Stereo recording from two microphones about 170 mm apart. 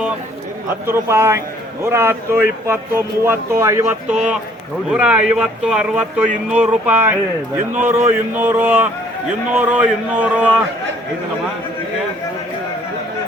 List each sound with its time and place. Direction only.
0.9 s speech: 15° right (ahead or behind)
4.1 s a man's voice: 5° right (ahead or behind)